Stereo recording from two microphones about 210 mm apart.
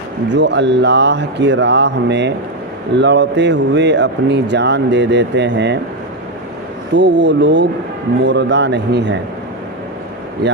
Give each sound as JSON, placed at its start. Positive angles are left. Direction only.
{"t": 0.3, "sound": "speech", "side_deg": -55}
{"t": 6.9, "sound": "speech", "side_deg": -55}
{"t": 10.4, "sound": "speech", "side_deg": -50}